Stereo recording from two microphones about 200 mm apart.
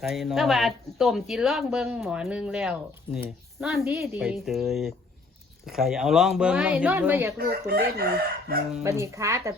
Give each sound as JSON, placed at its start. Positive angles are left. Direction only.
{"t": 0.0, "sound": "speech", "side_deg": 0}
{"t": 7.3, "sound": "chicken", "side_deg": -50}
{"t": 8.8, "sound": "speech", "side_deg": -15}